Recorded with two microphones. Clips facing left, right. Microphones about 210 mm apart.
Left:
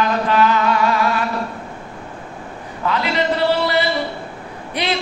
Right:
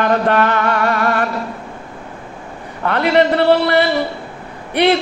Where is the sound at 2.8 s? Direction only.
60° right (ahead or behind).